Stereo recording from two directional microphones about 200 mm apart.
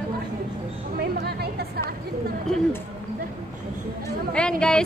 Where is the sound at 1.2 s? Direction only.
50° right (ahead or behind).